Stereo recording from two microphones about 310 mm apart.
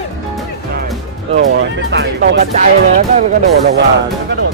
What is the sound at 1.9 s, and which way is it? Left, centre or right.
Speech, right.